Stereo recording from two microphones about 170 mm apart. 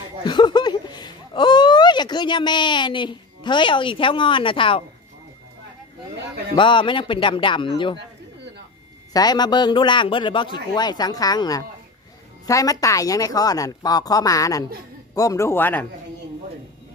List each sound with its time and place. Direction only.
0.2 s speech: 25° left (ahead or behind)
6.1 s a man's voice: 75° right (ahead or behind)
6.5 s a man's voice: 30° left (ahead or behind)
9.1 s a man's voice: 25° left (ahead or behind)